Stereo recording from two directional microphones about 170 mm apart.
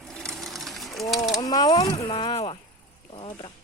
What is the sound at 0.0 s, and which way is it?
Sewing machine, 5° left (ahead or behind).